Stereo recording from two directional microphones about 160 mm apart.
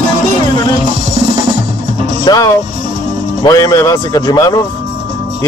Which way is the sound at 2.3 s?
30° left (ahead or behind).